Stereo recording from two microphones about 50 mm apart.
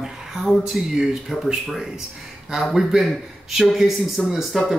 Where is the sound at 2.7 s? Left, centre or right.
Centre.